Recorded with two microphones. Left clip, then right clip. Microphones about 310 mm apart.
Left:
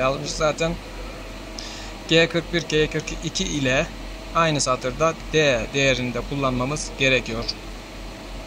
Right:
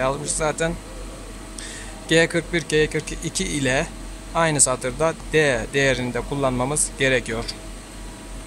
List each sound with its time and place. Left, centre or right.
0.0 s speech: right
2.0 s speech: right